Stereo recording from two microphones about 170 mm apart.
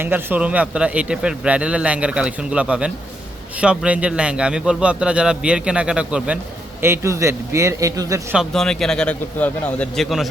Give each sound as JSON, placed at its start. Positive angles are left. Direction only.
{"t": 0.0, "sound": "a man's voice", "side_deg": -10}
{"t": 8.4, "sound": "a man's voice", "side_deg": 5}